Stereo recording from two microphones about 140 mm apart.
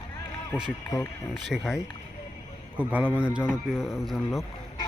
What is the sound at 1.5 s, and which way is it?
A man's voice, 5° right (ahead or behind).